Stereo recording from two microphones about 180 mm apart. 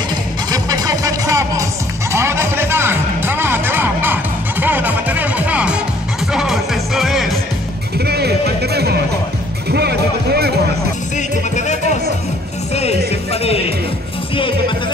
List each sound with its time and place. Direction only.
0.5 s music: 20° right (ahead or behind); by 7.3 s centre (ahead or behind)
8.0 s music: 65° right (ahead or behind)
11.1 s music: 40° left (ahead or behind)